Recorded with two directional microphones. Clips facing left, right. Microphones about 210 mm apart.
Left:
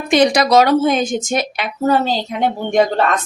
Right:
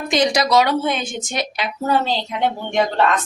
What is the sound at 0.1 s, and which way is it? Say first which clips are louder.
A woman's voice: left 5 dB; 55° left (ahead or behind).